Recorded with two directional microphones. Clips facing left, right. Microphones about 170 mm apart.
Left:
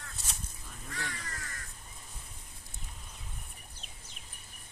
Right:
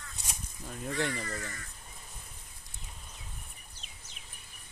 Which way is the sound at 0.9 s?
90° right.